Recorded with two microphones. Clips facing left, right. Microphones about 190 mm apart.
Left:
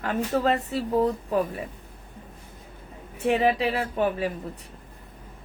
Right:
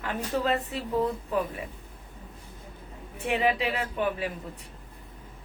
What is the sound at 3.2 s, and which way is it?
Speech, 40° left (ahead or behind).